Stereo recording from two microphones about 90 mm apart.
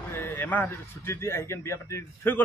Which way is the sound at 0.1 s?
20° left (ahead or behind).